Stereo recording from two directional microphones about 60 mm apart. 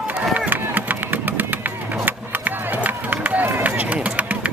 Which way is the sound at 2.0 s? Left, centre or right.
Right.